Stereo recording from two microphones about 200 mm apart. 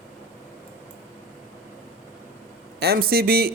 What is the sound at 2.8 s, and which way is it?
Speech, 50° right (ahead or behind).